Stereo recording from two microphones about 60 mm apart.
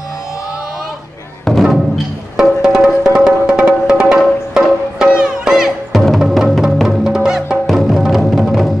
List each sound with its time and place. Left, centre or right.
2.3 s music: centre